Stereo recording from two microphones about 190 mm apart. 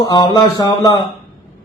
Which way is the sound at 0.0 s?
20° left (ahead or behind).